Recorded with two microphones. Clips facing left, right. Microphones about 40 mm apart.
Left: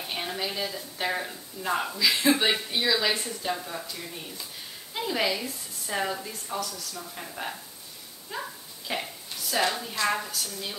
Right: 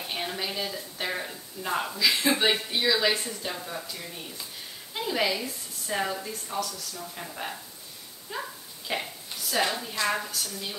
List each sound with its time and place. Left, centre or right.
0.0 s a woman's voice: centre